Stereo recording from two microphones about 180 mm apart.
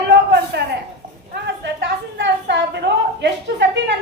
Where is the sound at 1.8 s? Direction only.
75° right (ahead or behind).